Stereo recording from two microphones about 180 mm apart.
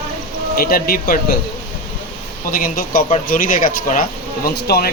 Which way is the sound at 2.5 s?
55° left (ahead or behind).